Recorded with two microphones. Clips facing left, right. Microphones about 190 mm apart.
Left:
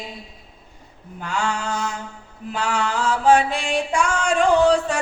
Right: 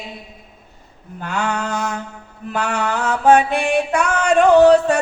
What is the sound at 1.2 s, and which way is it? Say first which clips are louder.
Mantra: right 3 dB; 60° right (ahead or behind).